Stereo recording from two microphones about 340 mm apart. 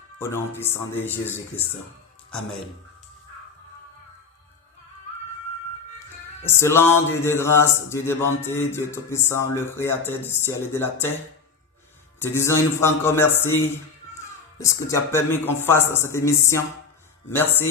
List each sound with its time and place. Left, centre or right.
0.2 s speech: centre
6.4 s speech: centre
12.2 s speech: centre